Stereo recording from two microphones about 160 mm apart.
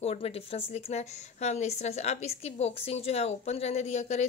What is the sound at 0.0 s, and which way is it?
A woman's voice, 40° left (ahead or behind).